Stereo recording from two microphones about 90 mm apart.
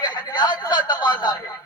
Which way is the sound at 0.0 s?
55° left (ahead or behind).